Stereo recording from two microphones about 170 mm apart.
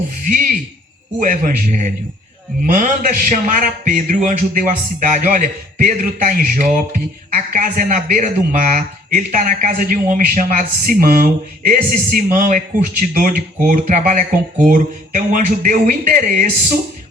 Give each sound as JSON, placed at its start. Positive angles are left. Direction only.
{"t": 0.3, "sound": "a man's voice", "side_deg": -55}